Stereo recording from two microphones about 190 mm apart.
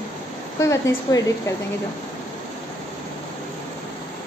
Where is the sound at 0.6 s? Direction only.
15° left (ahead or behind).